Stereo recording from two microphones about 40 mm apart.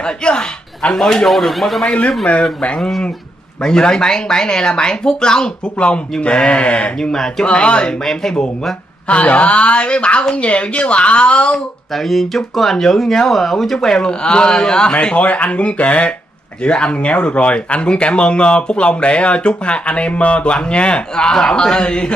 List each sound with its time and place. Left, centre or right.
0.0 s speech: left
0.9 s speech: centre
3.6 s speech: centre
7.0 s speech: centre
7.4 s speech: left
9.0 s speech: left
11.9 s speech: centre
13.9 s speech: left
14.9 s speech: left
21.2 s speech: centre